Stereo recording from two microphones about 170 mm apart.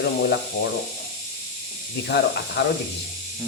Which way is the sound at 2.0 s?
80° left.